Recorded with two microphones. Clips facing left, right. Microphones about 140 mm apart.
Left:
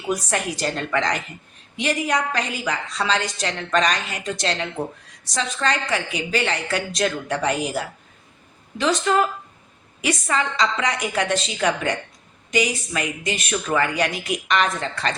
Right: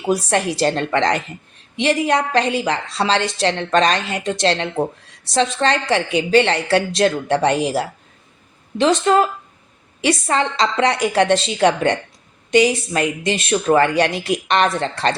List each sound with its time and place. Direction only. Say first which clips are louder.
0.1 s a woman's voice: right 6 dB; 30° right (ahead or behind)